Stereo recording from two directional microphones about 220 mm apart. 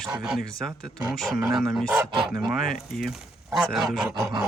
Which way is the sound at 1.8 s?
5° right (ahead or behind).